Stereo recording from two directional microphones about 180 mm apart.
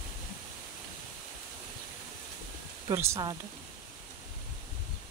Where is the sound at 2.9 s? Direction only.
20° right (ahead or behind).